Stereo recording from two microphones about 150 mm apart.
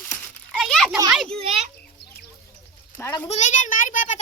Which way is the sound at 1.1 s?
Centre (ahead or behind).